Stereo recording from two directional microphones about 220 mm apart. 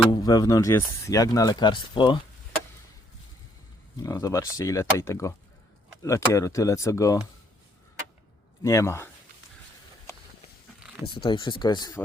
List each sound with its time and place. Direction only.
0.1 s speech: 15° left (ahead or behind)
3.9 s speech: 15° left (ahead or behind)
8.6 s speech: 15° left (ahead or behind)
11.0 s speech: 20° left (ahead or behind)